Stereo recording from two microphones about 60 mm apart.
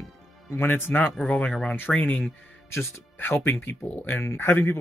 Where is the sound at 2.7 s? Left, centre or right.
Left.